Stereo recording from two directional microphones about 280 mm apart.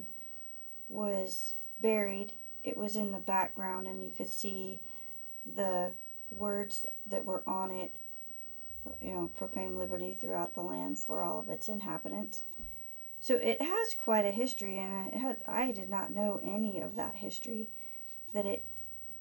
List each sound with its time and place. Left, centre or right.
0.9 s speech: right